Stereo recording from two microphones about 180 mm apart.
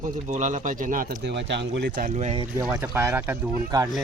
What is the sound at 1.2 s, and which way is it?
Speech, 75° right (ahead or behind).